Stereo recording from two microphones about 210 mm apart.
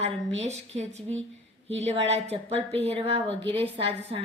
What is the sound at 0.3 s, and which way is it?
A woman's voice, 30° right (ahead or behind).